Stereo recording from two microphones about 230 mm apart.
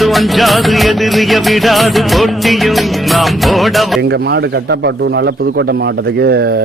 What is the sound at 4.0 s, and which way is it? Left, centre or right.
A man's voice, right.